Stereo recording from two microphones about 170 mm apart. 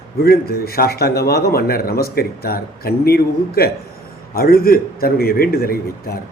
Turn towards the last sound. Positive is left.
turn(degrees=60)  # may be behind; listen again after turning